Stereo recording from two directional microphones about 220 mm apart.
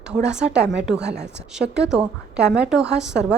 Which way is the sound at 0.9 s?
50° right (ahead or behind).